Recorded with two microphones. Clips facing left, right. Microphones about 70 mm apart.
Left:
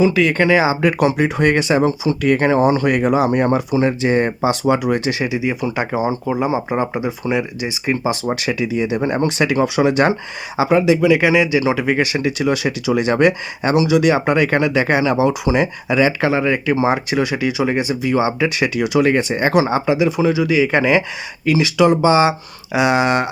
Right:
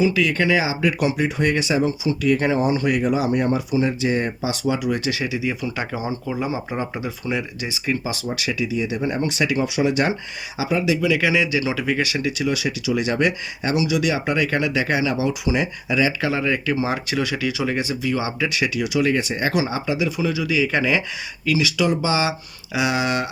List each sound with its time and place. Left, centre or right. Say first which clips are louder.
0.0 s speech: left 5 dB; left
8.4 s speech: left 4 dB; left
16.3 s speech: left 5 dB; left